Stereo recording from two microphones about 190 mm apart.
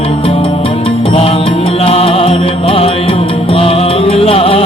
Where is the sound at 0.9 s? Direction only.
30° left (ahead or behind).